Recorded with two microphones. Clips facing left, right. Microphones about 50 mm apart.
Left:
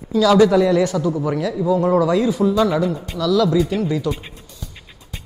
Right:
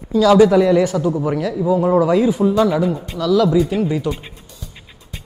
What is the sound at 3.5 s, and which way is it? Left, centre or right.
Speech, centre.